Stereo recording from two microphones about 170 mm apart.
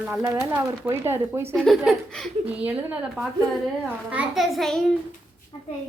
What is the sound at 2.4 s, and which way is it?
A woman's voice, 10° right (ahead or behind).